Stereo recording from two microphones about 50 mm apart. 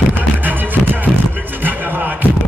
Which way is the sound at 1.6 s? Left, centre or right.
Right.